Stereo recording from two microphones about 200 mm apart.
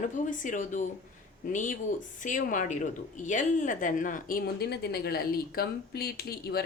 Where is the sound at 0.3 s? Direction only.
40° left (ahead or behind).